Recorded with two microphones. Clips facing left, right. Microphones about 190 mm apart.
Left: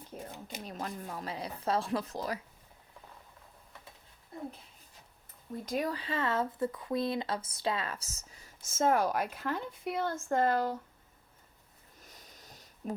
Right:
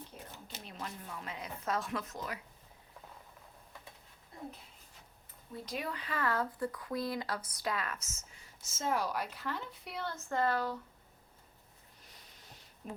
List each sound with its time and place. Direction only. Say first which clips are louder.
0.6 s speech: left 5 dB; 40° left (ahead or behind)
5.6 s speech: left 7 dB; 40° left (ahead or behind)
12.0 s sniff: left 3 dB; 45° left (ahead or behind)